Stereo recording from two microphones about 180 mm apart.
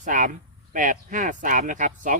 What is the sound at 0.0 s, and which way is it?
Speech, 45° right (ahead or behind).